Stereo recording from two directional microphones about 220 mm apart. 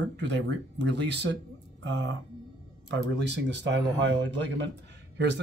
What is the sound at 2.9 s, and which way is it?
Speech, 50° right (ahead or behind).